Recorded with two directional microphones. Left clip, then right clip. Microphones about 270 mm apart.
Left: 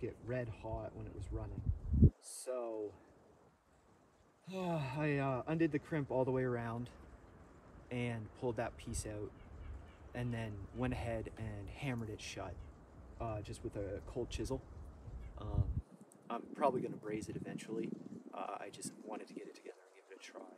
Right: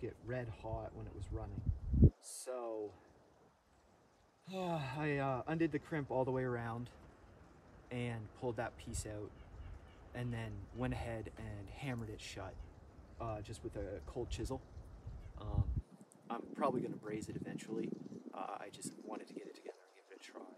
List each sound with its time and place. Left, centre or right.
0.0 s speech: centre
4.5 s speech: centre
7.9 s speech: centre